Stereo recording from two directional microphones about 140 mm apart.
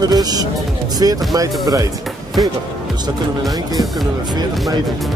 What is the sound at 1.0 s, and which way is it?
Music, 25° right (ahead or behind).